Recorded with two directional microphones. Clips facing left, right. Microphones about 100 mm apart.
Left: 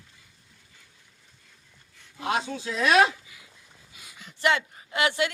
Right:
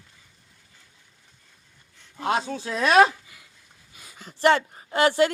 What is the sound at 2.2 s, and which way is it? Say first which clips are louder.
A woman's voice: right 3 dB; 40° right (ahead or behind).